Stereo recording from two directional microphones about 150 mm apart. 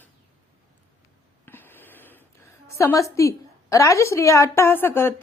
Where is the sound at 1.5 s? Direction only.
15° left (ahead or behind).